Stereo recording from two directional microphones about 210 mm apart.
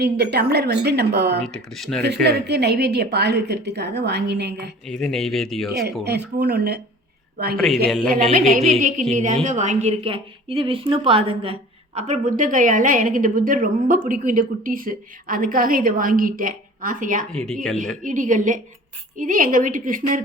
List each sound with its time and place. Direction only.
0.0 s a woman's voice: 50° right (ahead or behind)
1.5 s speech: centre (ahead or behind)
2.2 s a woman's voice: 55° right (ahead or behind)
4.9 s speech: 5° left (ahead or behind)
5.7 s a woman's voice: 50° right (ahead or behind)
8.8 s a woman's voice: 35° right (ahead or behind)
17.3 s speech: centre (ahead or behind)
18.0 s a woman's voice: 40° right (ahead or behind)